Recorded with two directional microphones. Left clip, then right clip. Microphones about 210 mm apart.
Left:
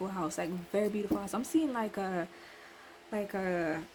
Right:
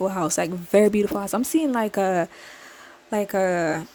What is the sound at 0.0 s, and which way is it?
Speech, 50° right (ahead or behind).